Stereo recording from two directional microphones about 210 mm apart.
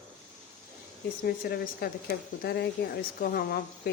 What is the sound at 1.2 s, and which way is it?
Speech, 45° left (ahead or behind).